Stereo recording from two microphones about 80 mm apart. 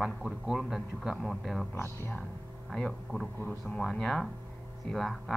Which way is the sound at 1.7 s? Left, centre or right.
Left.